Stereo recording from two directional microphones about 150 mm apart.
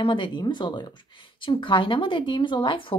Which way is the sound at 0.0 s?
35° left (ahead or behind).